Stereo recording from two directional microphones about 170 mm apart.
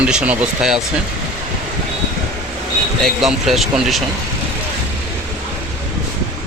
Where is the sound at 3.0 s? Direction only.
Centre (ahead or behind).